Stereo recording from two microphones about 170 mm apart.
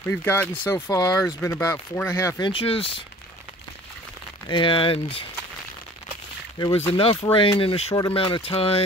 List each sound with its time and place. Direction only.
0.1 s speech: 10° left (ahead or behind)
2.5 s speech: 35° left (ahead or behind)
4.5 s speech: 30° left (ahead or behind)
6.9 s speech: 30° left (ahead or behind)